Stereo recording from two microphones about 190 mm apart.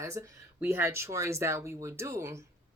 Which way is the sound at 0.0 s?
15° right (ahead or behind).